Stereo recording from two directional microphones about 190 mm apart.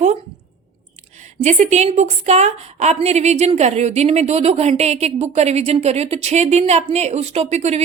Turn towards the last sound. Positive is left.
turn(degrees=-35)  # may be behind; listen again after turning